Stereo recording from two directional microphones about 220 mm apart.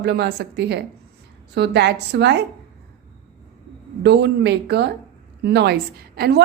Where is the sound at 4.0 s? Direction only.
50° right (ahead or behind).